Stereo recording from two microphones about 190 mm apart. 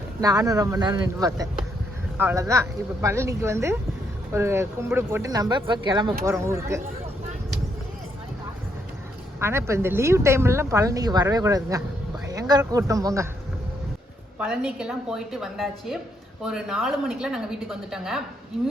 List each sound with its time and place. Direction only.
0.2 s speech: 20° right (ahead or behind)
9.4 s speech: 15° right (ahead or behind)
14.3 s speech: 5° right (ahead or behind)